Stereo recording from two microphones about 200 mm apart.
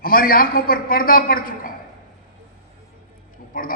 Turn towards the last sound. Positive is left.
turn(degrees=45)  # may be behind; listen again after turning